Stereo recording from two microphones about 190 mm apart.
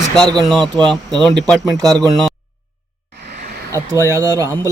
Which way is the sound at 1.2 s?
5° left (ahead or behind).